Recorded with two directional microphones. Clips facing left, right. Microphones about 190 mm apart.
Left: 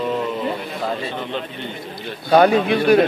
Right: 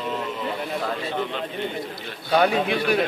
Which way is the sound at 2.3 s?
45° left (ahead or behind).